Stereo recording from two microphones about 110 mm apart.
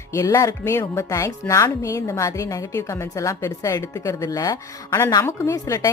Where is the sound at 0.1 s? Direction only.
30° left (ahead or behind).